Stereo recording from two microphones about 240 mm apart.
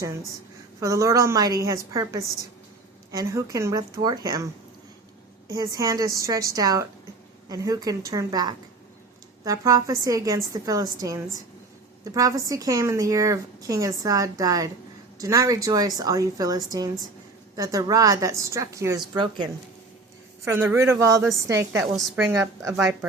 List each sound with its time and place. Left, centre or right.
0.8 s a woman's voice: centre
5.5 s a woman's voice: centre